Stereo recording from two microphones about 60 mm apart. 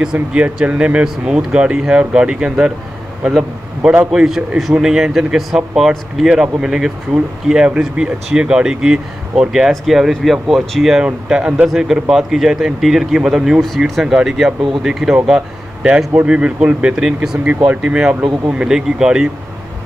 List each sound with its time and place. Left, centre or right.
0.0 s speech: centre
4.1 s speech: centre